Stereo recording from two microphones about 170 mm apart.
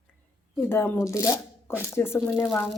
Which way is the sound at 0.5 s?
15° left (ahead or behind).